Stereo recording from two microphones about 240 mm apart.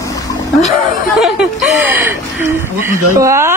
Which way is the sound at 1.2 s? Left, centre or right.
Centre.